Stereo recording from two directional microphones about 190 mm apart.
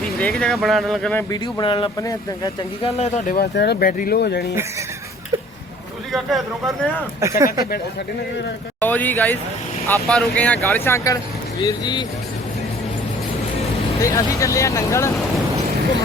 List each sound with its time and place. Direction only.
0.2 s speech: 5° left (ahead or behind)
1.3 s speech: 20° left (ahead or behind)
2.8 s speech: 35° left (ahead or behind)
3.3 s speech: 60° left (ahead or behind)
6.1 s speech: centre (ahead or behind)
7.2 s speech: 15° right (ahead or behind)
8.8 s speech: 10° left (ahead or behind)
14.0 s speech: 15° left (ahead or behind)